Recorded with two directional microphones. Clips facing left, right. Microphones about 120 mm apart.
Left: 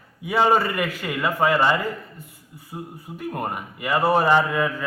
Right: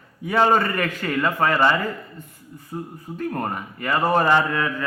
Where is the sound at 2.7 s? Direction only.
10° left (ahead or behind).